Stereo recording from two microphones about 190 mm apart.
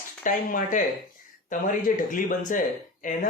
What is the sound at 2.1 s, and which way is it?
Speech, 45° left (ahead or behind).